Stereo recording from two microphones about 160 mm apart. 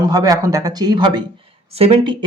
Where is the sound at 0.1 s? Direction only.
20° right (ahead or behind).